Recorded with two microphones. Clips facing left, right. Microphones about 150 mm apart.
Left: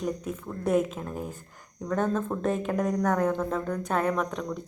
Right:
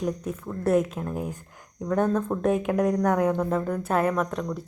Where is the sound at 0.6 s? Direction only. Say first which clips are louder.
Right 2 dB; 10° left (ahead or behind).